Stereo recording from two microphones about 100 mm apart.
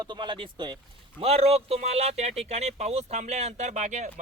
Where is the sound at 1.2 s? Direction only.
90° right.